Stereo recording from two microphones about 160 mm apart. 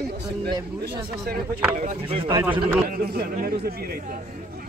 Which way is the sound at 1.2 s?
65° right (ahead or behind).